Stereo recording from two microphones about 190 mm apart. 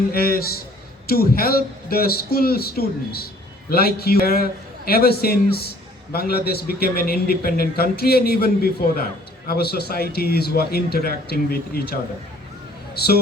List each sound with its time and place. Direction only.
0.1 s a man's voice: 55° left (ahead or behind)